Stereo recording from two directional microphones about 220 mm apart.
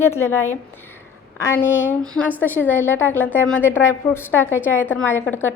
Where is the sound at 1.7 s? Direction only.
60° left (ahead or behind).